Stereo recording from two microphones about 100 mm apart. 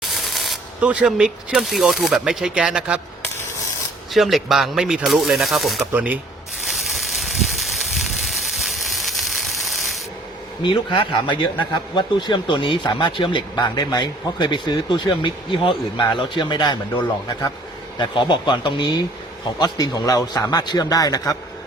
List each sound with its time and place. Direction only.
0.0 s rub: centre (ahead or behind)
0.8 s speech: 15° right (ahead or behind)
4.1 s speech: centre (ahead or behind)
5.9 s speech: 15° right (ahead or behind)
6.7 s a sound: centre (ahead or behind)
10.6 s speech: 55° left (ahead or behind)
13.7 s speech: 45° left (ahead or behind)
17.0 s speech: 35° left (ahead or behind)
17.9 s speech: 50° left (ahead or behind)